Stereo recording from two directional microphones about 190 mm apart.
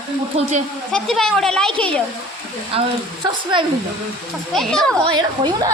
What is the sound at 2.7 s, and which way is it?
Speech, 30° right (ahead or behind).